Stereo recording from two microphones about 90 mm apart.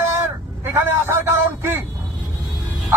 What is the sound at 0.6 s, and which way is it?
A man's voice, 25° right (ahead or behind).